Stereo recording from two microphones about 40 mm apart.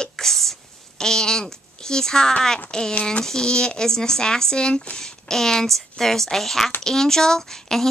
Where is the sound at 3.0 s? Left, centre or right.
Left.